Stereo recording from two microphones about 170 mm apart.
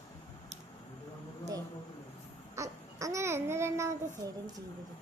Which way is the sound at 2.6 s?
20° right (ahead or behind).